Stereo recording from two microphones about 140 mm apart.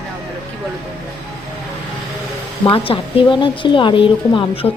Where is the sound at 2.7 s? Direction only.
40° left (ahead or behind).